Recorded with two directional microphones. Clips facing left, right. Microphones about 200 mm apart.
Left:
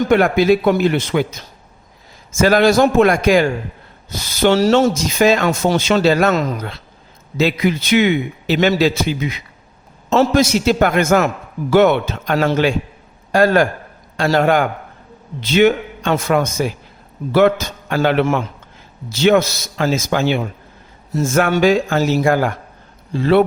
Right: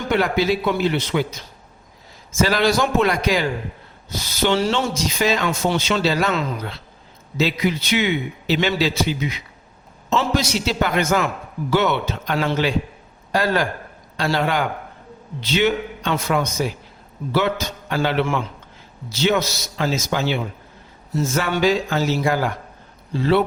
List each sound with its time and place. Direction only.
0.1 s speech: 50° left (ahead or behind)
10.1 s speech: 50° left (ahead or behind)